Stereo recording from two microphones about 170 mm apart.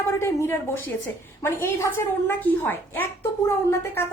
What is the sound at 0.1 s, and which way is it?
A woman's voice, 15° left (ahead or behind).